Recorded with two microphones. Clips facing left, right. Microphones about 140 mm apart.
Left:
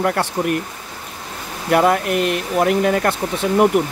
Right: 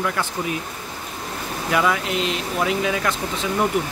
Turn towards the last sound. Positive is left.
turn(degrees=55)  # may be behind; listen again after turning